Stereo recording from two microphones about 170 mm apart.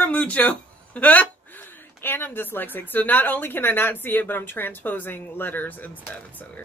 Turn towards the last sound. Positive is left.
turn(degrees=10)  # may be behind; listen again after turning